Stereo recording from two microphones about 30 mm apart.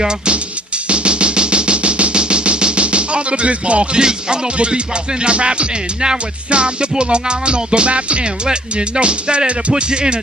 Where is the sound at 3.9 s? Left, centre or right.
Right.